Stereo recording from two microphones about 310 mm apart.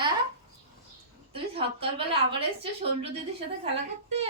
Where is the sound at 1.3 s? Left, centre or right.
Centre.